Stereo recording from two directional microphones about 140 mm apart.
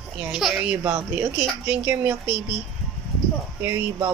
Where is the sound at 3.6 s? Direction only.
20° right (ahead or behind).